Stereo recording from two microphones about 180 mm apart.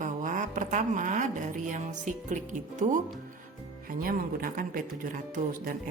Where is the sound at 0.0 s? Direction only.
45° right (ahead or behind).